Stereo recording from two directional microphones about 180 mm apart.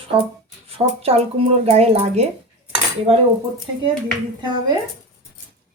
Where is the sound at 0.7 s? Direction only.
35° right (ahead or behind).